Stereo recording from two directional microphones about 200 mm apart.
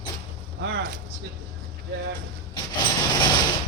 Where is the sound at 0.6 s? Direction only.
65° right (ahead or behind).